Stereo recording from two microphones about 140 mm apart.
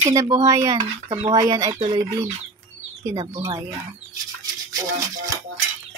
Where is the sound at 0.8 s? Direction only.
55° right (ahead or behind).